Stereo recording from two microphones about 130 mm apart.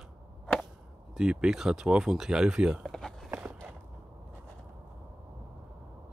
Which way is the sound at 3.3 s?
15° right (ahead or behind).